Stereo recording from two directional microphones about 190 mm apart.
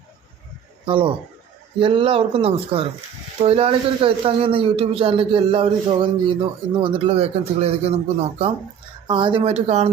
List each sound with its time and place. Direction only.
0.9 s speech: 25° right (ahead or behind)